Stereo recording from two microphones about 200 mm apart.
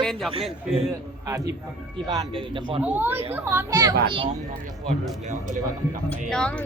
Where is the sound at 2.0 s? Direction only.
25° right (ahead or behind).